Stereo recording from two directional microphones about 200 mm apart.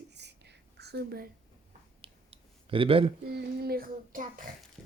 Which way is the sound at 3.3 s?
50° right (ahead or behind).